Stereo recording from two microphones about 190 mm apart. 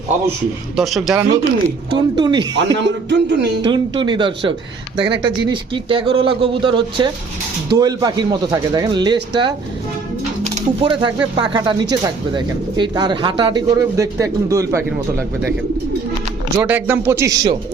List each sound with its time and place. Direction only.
0.8 s speech: centre (ahead or behind)
1.9 s speech: 20° right (ahead or behind)
2.6 s speech: 70° right (ahead or behind)
3.6 s speech: 25° right (ahead or behind)
16.6 s speech: 10° right (ahead or behind)